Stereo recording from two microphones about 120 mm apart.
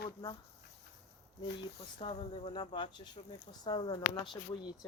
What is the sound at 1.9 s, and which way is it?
Speech, 45° left (ahead or behind).